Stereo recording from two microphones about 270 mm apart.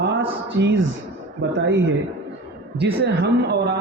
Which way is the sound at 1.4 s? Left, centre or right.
Right.